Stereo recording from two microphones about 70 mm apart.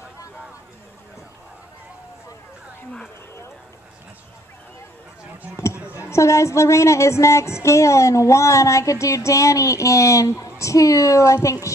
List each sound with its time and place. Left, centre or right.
5.9 s speech: left